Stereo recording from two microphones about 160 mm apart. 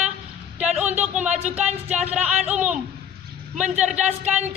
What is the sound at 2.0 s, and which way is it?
Speech, 5° right (ahead or behind).